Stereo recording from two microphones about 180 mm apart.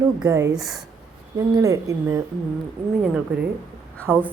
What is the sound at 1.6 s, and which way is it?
Speech, 20° right (ahead or behind).